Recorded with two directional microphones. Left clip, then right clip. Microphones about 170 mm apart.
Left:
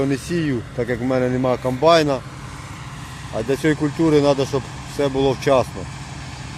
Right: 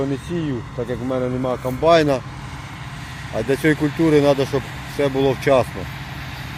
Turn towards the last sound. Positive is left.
turn(degrees=5)  # may be behind; listen again after turning